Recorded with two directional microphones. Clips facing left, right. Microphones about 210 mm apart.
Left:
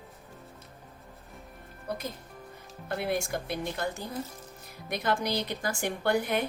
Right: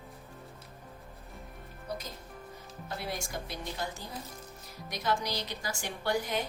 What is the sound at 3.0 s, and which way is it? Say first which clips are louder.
A woman's voice: left 8 dB; 55° left (ahead or behind).